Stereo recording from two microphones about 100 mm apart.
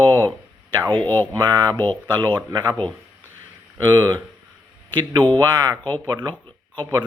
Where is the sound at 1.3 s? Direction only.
40° right (ahead or behind).